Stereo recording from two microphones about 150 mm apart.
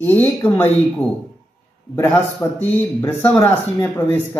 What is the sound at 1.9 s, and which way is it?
Speech, 10° left (ahead or behind).